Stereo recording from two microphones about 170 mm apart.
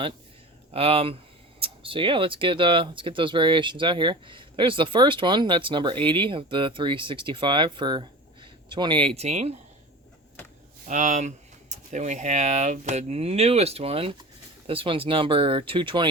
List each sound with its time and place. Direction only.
0.7 s speech: 35° right (ahead or behind)
10.8 s speech: 45° right (ahead or behind); by 16.0 s 30° right (ahead or behind)